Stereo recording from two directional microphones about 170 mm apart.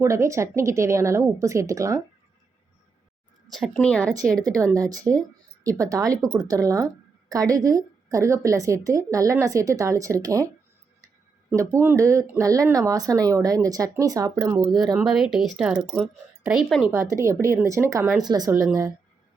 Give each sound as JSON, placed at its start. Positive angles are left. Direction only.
{"t": 0.0, "sound": "speech", "side_deg": -15}
{"t": 3.5, "sound": "a woman's voice", "side_deg": 5}
{"t": 4.6, "sound": "a woman's voice", "side_deg": -20}
{"t": 11.5, "sound": "a woman's voice", "side_deg": -20}
{"t": 14.9, "sound": "a woman's voice", "side_deg": 0}
{"t": 16.9, "sound": "a woman's voice", "side_deg": -15}